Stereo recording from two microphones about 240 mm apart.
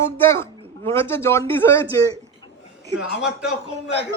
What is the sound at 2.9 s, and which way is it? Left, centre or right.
Speech, centre.